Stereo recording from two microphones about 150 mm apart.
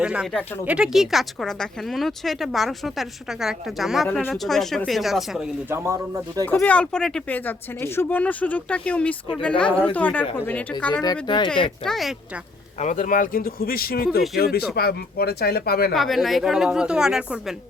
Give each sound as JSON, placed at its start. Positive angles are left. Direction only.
{"t": 0.0, "sound": "speech", "side_deg": -5}
{"t": 5.7, "sound": "speech", "side_deg": -20}
{"t": 6.4, "sound": "speech", "side_deg": 15}
{"t": 11.0, "sound": "speech", "side_deg": 30}
{"t": 11.9, "sound": "speech", "side_deg": 0}
{"t": 12.8, "sound": "speech", "side_deg": 55}
{"t": 16.0, "sound": "speech", "side_deg": 0}